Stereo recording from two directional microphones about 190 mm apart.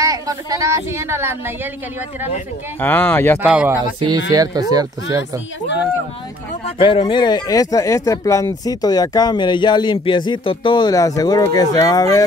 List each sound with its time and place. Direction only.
0.0 s speech: 20° right (ahead or behind)
2.8 s speech: 10° left (ahead or behind)
3.4 s speech: 10° right (ahead or behind)
6.8 s speech: 25° left (ahead or behind)